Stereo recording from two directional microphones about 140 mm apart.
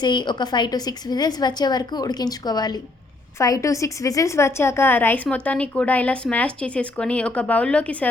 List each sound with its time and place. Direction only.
0.0 s a woman's voice: 35° left (ahead or behind); by 8.1 s 10° left (ahead or behind)